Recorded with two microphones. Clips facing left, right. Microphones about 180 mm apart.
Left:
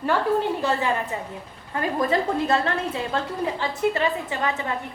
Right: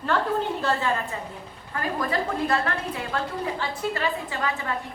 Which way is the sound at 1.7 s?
25° left (ahead or behind).